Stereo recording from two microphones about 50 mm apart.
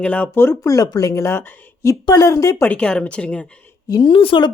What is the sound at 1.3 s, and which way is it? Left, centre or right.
Speech, left.